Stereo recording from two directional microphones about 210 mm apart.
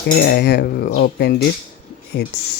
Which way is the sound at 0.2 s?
50° left (ahead or behind).